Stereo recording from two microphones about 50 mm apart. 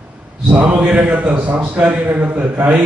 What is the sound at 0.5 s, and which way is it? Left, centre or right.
A man's voice, right.